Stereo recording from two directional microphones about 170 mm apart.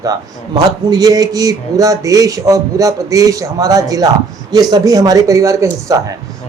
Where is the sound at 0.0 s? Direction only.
20° right (ahead or behind).